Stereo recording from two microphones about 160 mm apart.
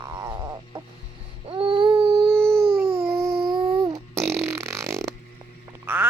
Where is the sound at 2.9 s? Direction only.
35° right (ahead or behind).